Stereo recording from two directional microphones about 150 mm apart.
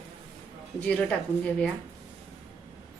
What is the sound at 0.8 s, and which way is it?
Speech, 5° left (ahead or behind).